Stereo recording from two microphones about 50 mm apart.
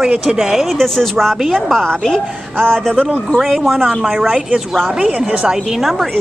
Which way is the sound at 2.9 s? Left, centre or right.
Right.